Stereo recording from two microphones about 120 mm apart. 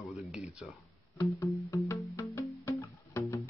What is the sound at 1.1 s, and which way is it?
Music, 25° left (ahead or behind).